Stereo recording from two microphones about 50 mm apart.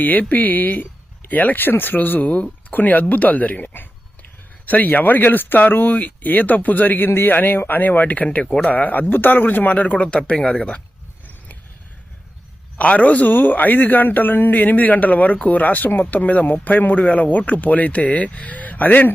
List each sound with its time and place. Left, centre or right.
0.0 s a man's voice: left
2.3 s speech: left
2.7 s a man's voice: left; by 10.8 s centre
12.7 s a man's voice: left